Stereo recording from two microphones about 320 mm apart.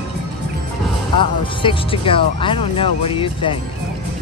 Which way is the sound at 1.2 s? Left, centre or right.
Centre.